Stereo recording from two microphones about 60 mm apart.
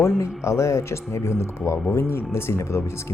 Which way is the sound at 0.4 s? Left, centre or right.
Left.